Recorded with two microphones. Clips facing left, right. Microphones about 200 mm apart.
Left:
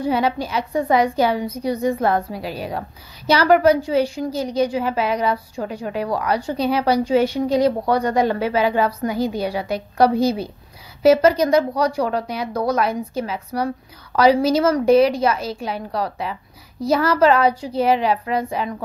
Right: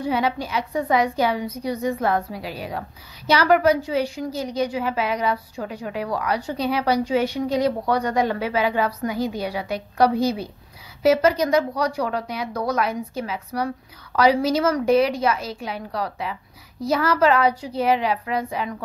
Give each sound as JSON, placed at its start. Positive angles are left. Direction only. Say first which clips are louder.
{"t": 0.0, "sound": "a woman's voice", "louder": "left 3 dB", "side_deg": 35}